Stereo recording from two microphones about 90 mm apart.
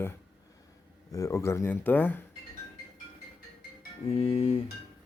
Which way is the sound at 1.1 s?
35° left (ahead or behind).